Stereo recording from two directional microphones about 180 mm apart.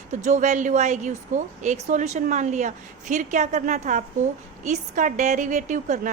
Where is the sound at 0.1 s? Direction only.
45° right (ahead or behind).